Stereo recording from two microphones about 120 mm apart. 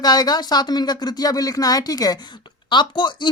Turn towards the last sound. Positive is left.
turn(degrees=40)  # may be behind; listen again after turning